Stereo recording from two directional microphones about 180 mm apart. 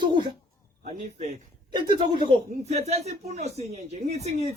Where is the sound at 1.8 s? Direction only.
25° right (ahead or behind).